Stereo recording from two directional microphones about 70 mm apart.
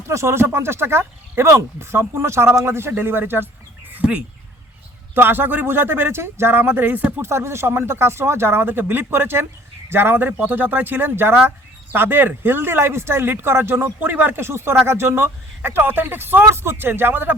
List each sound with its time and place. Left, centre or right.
0.1 s speech: right
5.1 s speech: right
7.2 s speech: right